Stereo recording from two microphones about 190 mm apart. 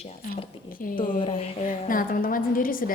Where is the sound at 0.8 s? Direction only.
45° left (ahead or behind).